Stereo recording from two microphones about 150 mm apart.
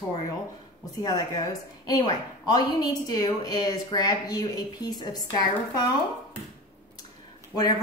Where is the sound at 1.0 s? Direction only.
25° left (ahead or behind).